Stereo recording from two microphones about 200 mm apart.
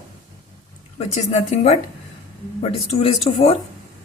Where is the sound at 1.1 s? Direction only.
35° left (ahead or behind).